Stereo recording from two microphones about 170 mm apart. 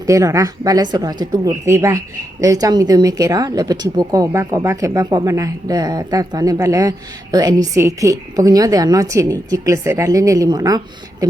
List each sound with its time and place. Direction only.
0.0 s a woman's voice: 20° right (ahead or behind)